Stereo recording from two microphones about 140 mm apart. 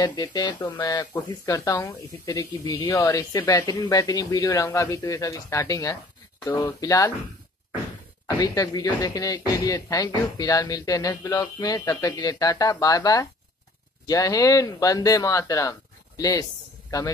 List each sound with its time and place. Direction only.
0.0 s speech: 30° left (ahead or behind)
8.4 s speech: 30° left (ahead or behind)